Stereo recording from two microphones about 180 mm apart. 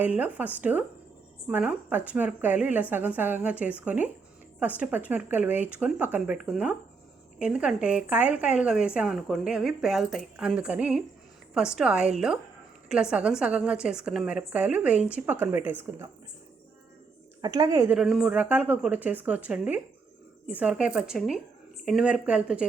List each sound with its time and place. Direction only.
0.0 s a woman's voice: 10° right (ahead or behind)
17.4 s a woman's voice: 20° right (ahead or behind)
17.9 s a woman's voice: 5° right (ahead or behind)